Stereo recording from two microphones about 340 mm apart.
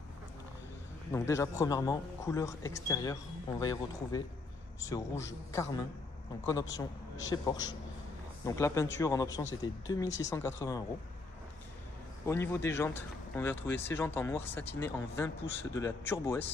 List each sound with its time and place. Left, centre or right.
1.1 s speech: centre
10.0 s speech: left
10.3 s speech: centre
12.3 s speech: centre